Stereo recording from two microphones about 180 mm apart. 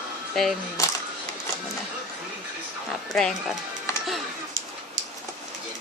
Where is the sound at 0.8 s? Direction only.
15° left (ahead or behind).